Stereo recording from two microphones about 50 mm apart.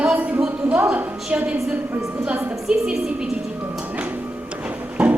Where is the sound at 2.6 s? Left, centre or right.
Centre.